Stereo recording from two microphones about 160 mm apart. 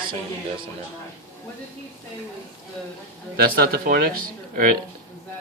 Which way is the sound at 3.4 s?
70° right (ahead or behind).